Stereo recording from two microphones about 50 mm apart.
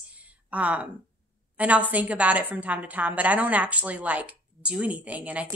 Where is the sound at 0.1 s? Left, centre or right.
Right.